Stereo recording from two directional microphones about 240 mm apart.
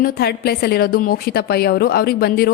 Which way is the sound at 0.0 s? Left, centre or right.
Left.